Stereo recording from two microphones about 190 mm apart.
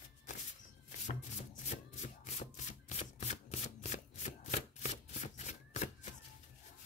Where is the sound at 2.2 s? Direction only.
35° left (ahead or behind).